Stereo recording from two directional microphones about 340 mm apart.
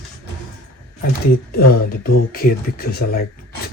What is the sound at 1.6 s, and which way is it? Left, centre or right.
Speech, left.